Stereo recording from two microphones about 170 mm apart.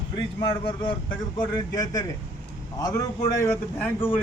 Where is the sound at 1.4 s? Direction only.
25° left (ahead or behind).